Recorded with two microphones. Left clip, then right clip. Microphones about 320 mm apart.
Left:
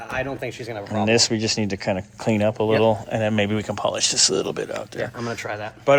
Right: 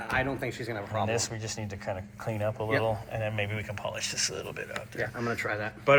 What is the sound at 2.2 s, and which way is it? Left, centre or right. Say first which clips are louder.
Speech: left 11 dB; left.